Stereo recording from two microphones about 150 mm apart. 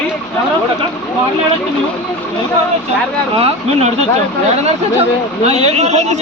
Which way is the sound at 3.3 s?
45° right (ahead or behind).